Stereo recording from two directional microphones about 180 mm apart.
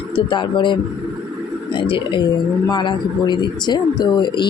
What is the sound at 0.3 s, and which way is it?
Speech, 25° left (ahead or behind).